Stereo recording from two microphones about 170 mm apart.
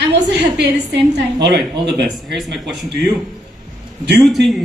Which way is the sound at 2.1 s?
Centre (ahead or behind).